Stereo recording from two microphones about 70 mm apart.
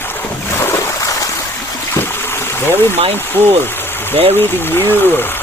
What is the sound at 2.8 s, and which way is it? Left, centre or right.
Speech, left.